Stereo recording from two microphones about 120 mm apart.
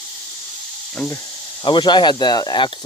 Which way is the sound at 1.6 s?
40° left (ahead or behind).